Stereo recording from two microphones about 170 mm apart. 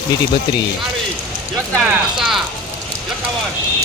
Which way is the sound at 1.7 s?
Centre (ahead or behind).